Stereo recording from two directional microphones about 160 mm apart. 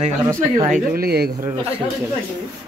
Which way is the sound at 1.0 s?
75° right (ahead or behind).